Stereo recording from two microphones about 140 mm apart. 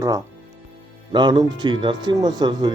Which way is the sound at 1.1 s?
30° right (ahead or behind).